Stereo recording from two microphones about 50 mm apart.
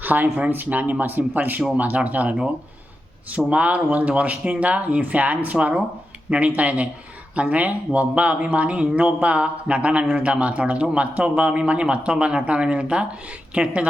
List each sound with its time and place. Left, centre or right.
0.0 s speech: right